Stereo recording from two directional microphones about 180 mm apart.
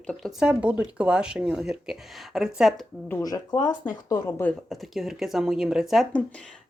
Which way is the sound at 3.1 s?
20° left (ahead or behind).